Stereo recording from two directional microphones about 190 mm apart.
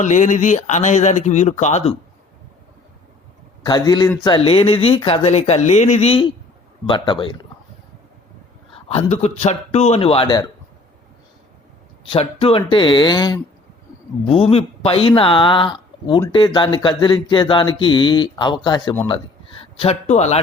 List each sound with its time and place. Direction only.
0.0 s speech: 40° left (ahead or behind)
3.6 s speech: 20° left (ahead or behind)
8.7 s speech: 30° left (ahead or behind)
12.0 s speech: 30° left (ahead or behind)